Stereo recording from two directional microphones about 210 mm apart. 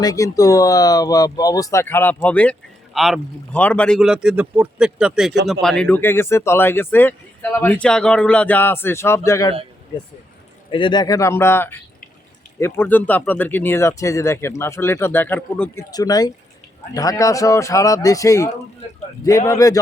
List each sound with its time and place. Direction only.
0.0 s speech: 15° left (ahead or behind)
10.7 s speech: 25° left (ahead or behind)